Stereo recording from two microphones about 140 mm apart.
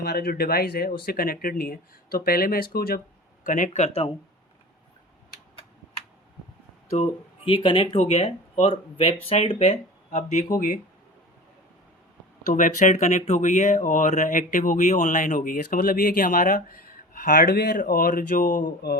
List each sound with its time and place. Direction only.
0.1 s speech: 90° left
3.4 s speech: 65° left (ahead or behind); by 4.1 s 50° left (ahead or behind)
6.9 s speech: 45° left (ahead or behind)
10.1 s speech: 55° left (ahead or behind)
10.5 s speech: 75° left (ahead or behind)
12.5 s speech: 65° left (ahead or behind)